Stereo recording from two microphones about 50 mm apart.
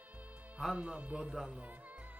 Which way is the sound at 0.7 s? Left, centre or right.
Right.